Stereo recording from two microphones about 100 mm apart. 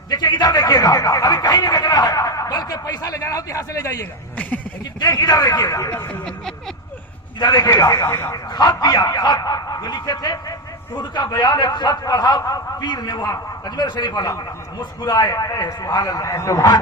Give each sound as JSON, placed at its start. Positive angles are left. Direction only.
{"t": 0.1, "sound": "a man's voice", "side_deg": 45}
{"t": 4.4, "sound": "a sound", "side_deg": 15}
{"t": 4.9, "sound": "speech", "side_deg": 45}
{"t": 7.3, "sound": "speech", "side_deg": 40}
{"t": 8.3, "sound": "a man's voice", "side_deg": 45}